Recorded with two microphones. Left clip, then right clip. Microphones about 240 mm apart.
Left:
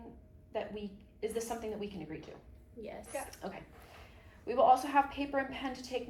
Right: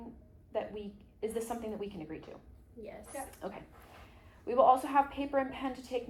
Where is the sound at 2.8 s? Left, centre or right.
Centre.